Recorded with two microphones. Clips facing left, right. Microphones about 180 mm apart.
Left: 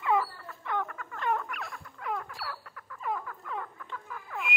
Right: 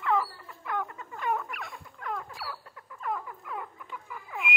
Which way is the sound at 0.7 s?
5° right (ahead or behind).